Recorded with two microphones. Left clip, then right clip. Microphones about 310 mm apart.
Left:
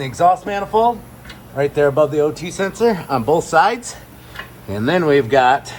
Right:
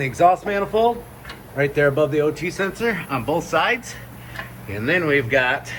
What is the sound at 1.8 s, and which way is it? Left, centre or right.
Speech, left.